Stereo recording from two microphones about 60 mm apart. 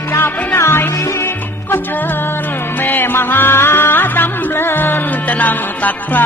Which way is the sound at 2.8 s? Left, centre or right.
Left.